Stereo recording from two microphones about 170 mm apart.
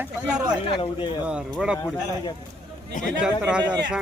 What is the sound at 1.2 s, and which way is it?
Speech, 5° right (ahead or behind).